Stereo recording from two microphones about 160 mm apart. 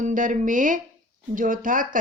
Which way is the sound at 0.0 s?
55° right (ahead or behind).